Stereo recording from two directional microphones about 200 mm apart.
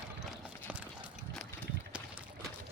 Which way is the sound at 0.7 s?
5° right (ahead or behind).